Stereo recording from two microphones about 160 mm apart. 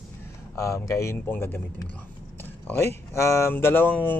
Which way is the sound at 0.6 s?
20° left (ahead or behind).